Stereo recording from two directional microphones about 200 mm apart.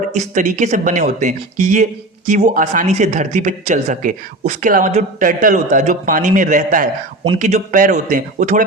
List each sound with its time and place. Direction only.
0.1 s speech: 40° right (ahead or behind)